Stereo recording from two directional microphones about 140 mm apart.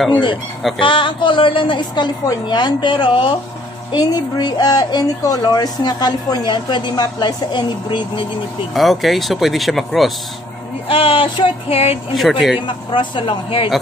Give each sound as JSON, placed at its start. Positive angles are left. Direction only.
{"t": 0.7, "sound": "a woman's voice", "side_deg": 35}
{"t": 8.7, "sound": "speech", "side_deg": 0}
{"t": 10.9, "sound": "a woman's voice", "side_deg": 40}
{"t": 12.1, "sound": "speech", "side_deg": 0}
{"t": 12.6, "sound": "a woman's voice", "side_deg": 35}